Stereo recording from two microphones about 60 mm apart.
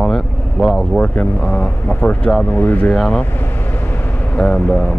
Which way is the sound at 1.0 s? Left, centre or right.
Left.